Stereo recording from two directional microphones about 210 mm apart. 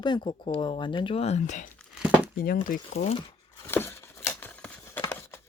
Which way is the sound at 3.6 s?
10° left (ahead or behind).